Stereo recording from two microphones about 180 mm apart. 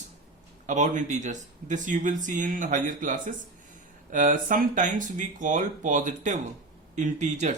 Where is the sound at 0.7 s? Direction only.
45° right (ahead or behind).